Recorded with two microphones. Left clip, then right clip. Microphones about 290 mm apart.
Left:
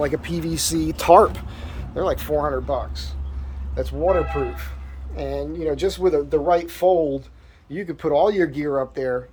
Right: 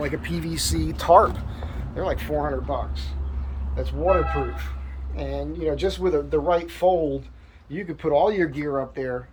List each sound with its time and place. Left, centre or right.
0.0 s speech: centre
2.2 s speech: centre